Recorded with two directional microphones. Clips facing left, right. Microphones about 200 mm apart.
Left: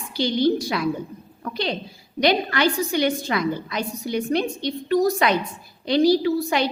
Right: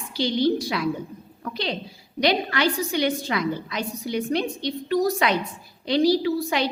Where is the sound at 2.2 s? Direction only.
50° left (ahead or behind).